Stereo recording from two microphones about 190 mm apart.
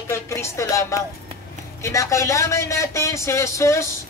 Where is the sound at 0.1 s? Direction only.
15° left (ahead or behind).